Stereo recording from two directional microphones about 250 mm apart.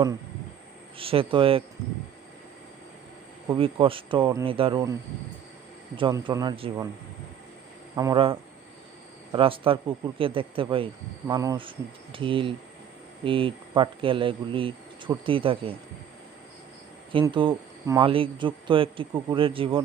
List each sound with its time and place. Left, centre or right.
0.9 s speech: right
3.4 s speech: centre
5.9 s speech: centre
7.9 s speech: centre
17.1 s speech: centre